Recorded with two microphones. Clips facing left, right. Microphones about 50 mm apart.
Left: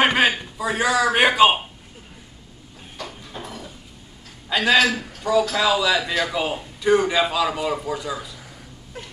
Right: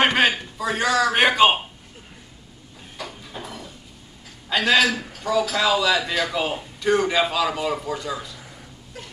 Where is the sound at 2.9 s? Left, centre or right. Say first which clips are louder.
Even; centre.